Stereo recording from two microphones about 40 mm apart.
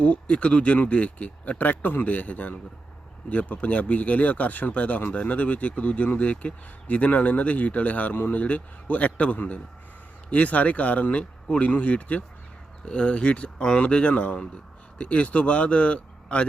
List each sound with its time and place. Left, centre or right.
0.0 s speech: left
12.8 s speech: left